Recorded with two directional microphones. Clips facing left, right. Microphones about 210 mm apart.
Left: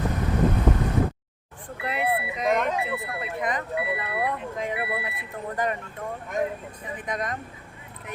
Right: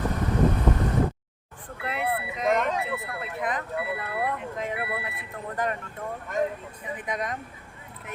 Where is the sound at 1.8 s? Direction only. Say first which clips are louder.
Left 2 dB; centre (ahead or behind).